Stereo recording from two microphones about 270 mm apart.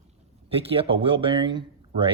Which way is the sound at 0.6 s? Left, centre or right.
Right.